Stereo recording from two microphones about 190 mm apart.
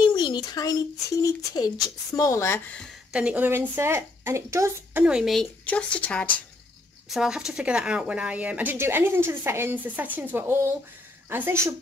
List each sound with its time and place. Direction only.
0.0 s a child's voice: 25° left (ahead or behind); by 2.9 s 10° left (ahead or behind)
3.1 s speech: 5° right (ahead or behind)
5.0 s speech: centre (ahead or behind)